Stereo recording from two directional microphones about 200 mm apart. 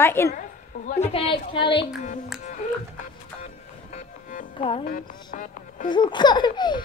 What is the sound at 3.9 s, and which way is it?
Music, 40° left (ahead or behind).